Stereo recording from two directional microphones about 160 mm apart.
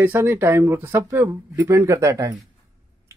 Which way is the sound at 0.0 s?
15° right (ahead or behind).